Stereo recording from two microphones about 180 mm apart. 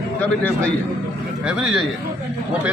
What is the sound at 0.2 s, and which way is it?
Speech, 5° left (ahead or behind).